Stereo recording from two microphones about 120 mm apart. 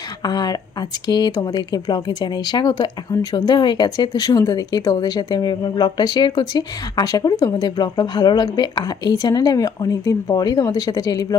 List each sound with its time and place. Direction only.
0.2 s speech: 35° left (ahead or behind)